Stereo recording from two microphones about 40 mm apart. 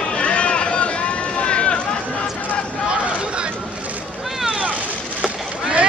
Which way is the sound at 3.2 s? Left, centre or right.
Right.